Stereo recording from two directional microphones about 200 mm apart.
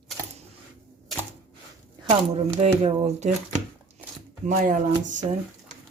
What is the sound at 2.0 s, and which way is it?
Speech, 30° right (ahead or behind).